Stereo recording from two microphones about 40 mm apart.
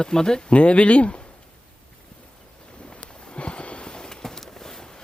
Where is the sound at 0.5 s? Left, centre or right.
Left.